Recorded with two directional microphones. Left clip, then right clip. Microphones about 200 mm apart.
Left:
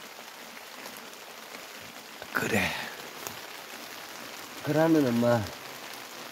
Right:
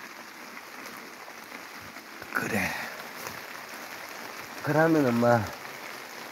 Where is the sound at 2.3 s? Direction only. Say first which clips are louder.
Left 1 dB; 30° left (ahead or behind).